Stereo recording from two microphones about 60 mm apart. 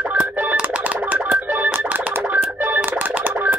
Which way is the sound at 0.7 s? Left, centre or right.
Right.